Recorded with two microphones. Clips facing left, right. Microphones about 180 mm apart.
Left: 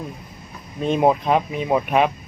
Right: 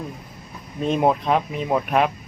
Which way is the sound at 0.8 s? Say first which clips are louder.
Left 2 dB; centre (ahead or behind).